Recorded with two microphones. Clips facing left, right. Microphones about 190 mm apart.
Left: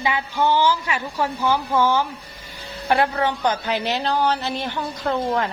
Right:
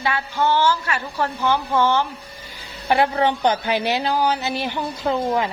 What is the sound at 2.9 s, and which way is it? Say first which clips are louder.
Speech: right 2 dB; 15° right (ahead or behind).